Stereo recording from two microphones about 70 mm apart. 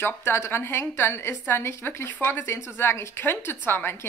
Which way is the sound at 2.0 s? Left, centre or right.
Left.